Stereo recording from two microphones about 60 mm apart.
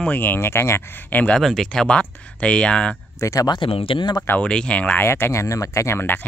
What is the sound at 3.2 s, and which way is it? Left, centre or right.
Speech, left.